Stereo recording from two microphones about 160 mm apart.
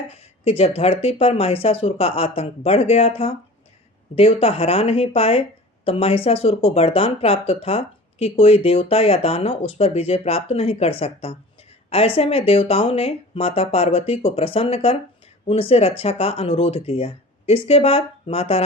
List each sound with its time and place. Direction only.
0.1 s speech: 40° left (ahead or behind)